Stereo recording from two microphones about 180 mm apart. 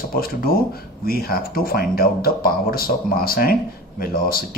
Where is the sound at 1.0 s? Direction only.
55° left (ahead or behind).